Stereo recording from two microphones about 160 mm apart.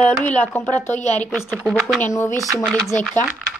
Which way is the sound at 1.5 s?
Centre (ahead or behind).